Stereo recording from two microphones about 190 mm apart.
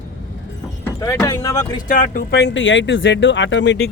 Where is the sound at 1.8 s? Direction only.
45° left (ahead or behind); by 3.9 s 70° left (ahead or behind).